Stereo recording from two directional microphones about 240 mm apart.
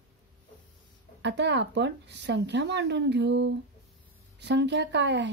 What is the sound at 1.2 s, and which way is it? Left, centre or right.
Speech, right.